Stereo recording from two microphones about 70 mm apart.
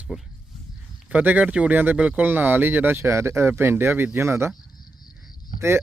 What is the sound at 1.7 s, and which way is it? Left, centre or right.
Speech, right.